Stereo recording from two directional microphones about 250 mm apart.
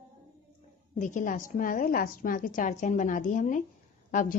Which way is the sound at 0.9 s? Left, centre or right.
Left.